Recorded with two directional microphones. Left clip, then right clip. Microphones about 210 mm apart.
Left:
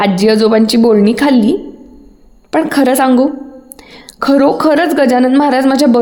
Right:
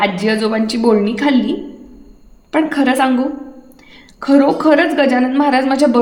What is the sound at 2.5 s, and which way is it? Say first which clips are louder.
A woman's voice: left 4 dB; 45° left (ahead or behind).